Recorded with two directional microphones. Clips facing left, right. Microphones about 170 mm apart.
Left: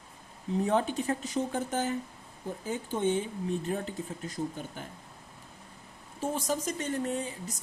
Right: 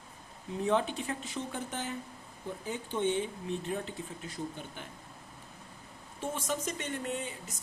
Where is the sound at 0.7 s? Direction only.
40° left (ahead or behind).